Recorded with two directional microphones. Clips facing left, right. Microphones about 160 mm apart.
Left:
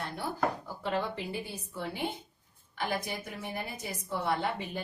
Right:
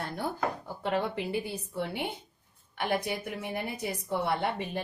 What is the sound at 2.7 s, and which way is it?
A woman's voice, 65° right (ahead or behind).